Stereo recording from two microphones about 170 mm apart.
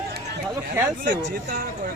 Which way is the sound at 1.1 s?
90° right.